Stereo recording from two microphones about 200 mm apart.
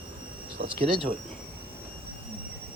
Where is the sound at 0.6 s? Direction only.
45° right (ahead or behind).